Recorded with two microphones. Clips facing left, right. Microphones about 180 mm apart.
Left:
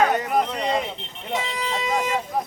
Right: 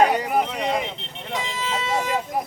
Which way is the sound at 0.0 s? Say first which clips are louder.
Right 1 dB; 15° right (ahead or behind).